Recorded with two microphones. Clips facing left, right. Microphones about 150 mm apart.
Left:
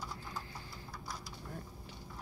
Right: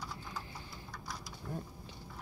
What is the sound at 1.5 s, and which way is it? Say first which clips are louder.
Speech: right 6 dB; 20° right (ahead or behind).